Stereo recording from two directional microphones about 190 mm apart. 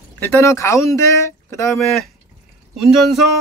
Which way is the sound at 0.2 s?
15° left (ahead or behind).